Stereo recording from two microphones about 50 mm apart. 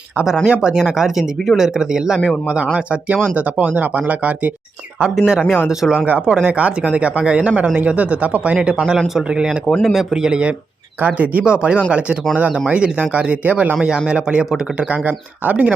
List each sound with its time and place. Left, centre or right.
0.4 s speech: centre
2.7 s speech: right
5.1 s speech: centre; by 8.5 s right
9.1 s speech: centre
11.0 s speech: right
11.4 s speech: right